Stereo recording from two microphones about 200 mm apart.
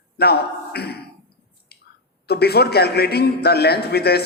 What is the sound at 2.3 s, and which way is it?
A man's voice, 55° left (ahead or behind).